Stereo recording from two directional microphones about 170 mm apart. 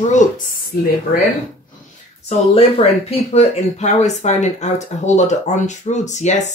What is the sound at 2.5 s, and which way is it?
Speech, 35° left (ahead or behind).